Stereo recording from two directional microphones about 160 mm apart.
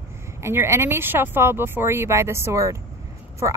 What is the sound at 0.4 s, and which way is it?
Speech, 15° right (ahead or behind).